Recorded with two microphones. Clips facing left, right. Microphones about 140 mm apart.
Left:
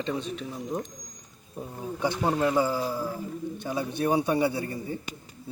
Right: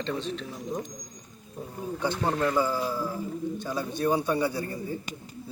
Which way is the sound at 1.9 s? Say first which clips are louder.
Left 2 dB; 20° left (ahead or behind).